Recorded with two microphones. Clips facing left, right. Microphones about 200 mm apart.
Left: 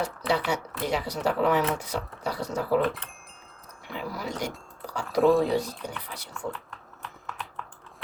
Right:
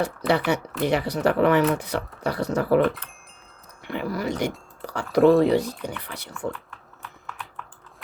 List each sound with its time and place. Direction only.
0.0 s speech: 60° right (ahead or behind)
5.2 s speech: centre (ahead or behind)
5.5 s speech: 65° right (ahead or behind)